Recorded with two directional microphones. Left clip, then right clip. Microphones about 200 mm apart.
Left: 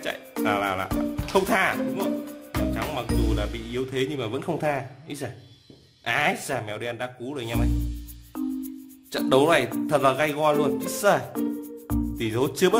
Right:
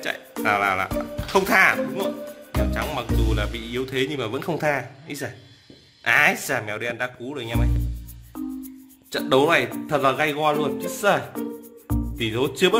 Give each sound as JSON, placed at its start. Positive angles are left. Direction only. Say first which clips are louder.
{"t": 0.0, "sound": "speech", "louder": "right 2 dB", "side_deg": 5}